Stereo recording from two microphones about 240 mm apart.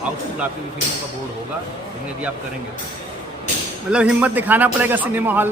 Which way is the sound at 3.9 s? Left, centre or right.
Centre.